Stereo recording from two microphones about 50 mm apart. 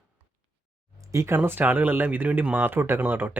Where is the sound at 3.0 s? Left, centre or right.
Right.